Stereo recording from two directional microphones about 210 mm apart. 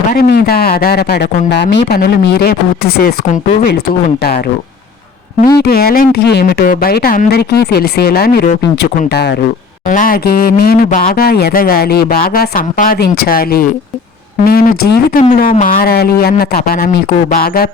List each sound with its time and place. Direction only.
0.1 s speech: 45° left (ahead or behind)
5.5 s speech: 45° left (ahead or behind)
9.9 s speech: 40° left (ahead or behind)